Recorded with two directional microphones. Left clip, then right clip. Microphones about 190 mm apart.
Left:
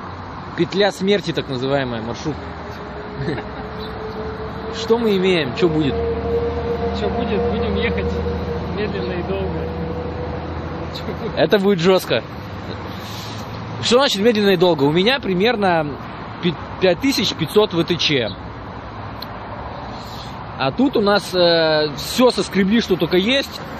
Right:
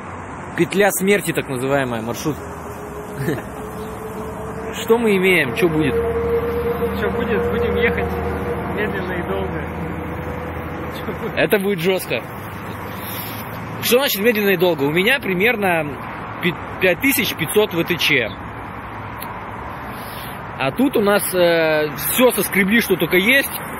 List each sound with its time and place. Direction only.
0.6 s speech: 5° right (ahead or behind)
4.7 s speech: centre (ahead or behind)
7.0 s speech: 15° left (ahead or behind)
11.3 s speech: 5° left (ahead or behind)
11.6 s speech: 20° left (ahead or behind)
13.8 s speech: 20° left (ahead or behind)
20.5 s speech: 5° left (ahead or behind)